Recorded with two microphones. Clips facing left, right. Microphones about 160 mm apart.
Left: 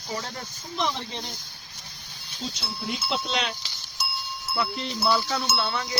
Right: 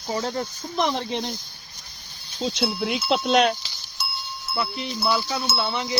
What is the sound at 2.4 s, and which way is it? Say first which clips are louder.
Speech: right 9 dB; 75° right (ahead or behind).